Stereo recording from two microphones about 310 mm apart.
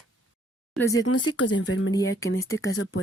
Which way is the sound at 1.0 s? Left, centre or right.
Left.